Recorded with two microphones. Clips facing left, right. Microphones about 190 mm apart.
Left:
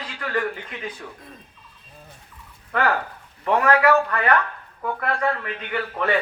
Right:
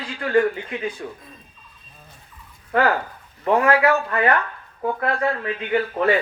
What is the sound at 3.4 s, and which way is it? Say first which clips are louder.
A man's voice: right 1 dB; 25° right (ahead or behind).